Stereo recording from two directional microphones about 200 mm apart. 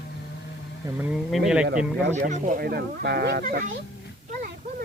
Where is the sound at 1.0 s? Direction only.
Centre (ahead or behind).